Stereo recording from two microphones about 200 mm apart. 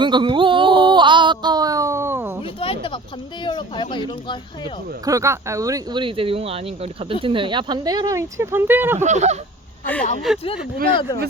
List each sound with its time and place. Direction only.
0.0 s a sound: 25° right (ahead or behind)
2.4 s a sound: 25° left (ahead or behind)
3.4 s speech: 25° left (ahead or behind)
5.0 s speech: 15° right (ahead or behind)
9.0 s speech: 35° right (ahead or behind)
10.0 s speech: 35° left (ahead or behind)